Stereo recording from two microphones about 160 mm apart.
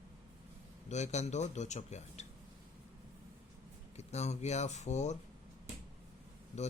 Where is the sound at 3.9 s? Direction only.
45° left (ahead or behind).